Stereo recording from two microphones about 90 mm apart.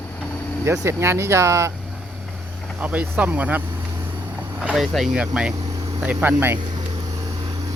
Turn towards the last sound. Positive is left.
turn(degrees=-25)  # may be behind; listen again after turning